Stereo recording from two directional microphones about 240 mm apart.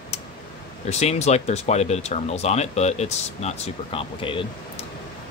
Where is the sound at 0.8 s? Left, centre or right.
Left.